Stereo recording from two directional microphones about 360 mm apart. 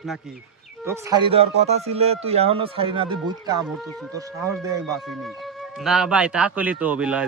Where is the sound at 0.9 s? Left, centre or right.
Centre.